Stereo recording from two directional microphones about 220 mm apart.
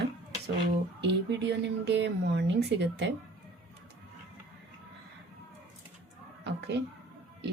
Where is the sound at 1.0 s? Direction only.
50° right (ahead or behind).